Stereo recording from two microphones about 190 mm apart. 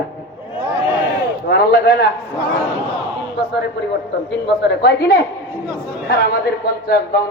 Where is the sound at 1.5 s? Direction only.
60° left (ahead or behind).